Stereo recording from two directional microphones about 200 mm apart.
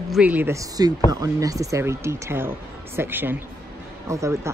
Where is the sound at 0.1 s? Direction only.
5° right (ahead or behind).